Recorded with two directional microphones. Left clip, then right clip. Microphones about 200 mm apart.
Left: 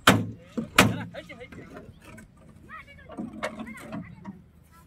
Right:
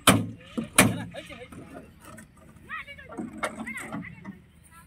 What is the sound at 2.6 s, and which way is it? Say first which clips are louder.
Rowboat: right 7 dB; 60° left (ahead or behind).